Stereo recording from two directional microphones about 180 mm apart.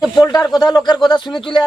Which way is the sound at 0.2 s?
20° left (ahead or behind).